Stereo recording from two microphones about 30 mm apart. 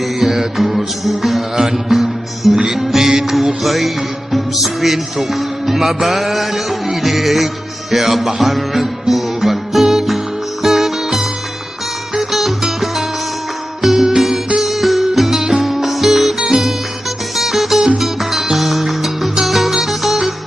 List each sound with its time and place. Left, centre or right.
0.2 s music: centre
0.6 s music: centre
12.3 s music: centre
14.6 s music: centre
15.3 s music: centre
15.6 s music: centre
16.3 s music: right
17.4 s music: centre